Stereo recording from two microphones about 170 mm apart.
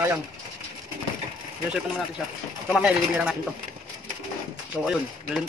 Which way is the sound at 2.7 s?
5° right (ahead or behind).